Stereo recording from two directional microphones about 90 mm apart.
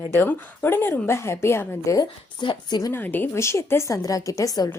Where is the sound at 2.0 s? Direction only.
60° left (ahead or behind).